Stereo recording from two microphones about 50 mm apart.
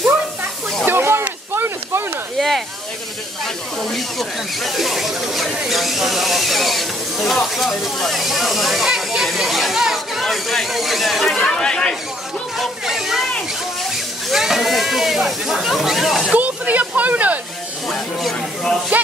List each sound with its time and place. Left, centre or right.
0.8 s snake: right
1.5 s a sound: right
2.3 s snake: centre
3.8 s speech: centre
11.4 s speech: centre
12.5 s speech: centre
16.3 s speech: right